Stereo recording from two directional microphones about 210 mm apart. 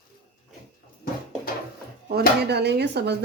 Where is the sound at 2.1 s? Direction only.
55° right (ahead or behind).